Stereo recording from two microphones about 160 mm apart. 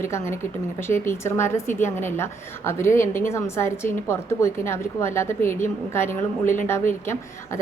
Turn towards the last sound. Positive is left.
turn(degrees=15)  # may be behind; listen again after turning